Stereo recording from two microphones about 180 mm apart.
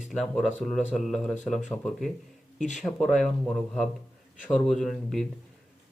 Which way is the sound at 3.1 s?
5° left (ahead or behind).